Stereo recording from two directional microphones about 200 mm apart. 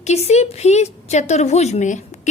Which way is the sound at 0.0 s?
35° left (ahead or behind).